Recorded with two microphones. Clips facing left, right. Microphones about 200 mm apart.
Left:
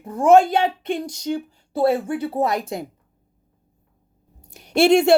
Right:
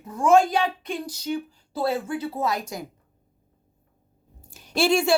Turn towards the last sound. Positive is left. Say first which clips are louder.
# left 6 dB
turn(degrees=20)  # may be behind; listen again after turning